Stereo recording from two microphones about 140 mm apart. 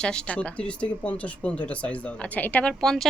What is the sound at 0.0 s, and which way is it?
Speech, 5° left (ahead or behind).